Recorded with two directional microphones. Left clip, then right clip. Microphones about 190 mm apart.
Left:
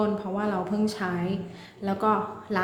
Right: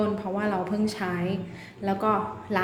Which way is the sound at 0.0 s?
15° left (ahead or behind).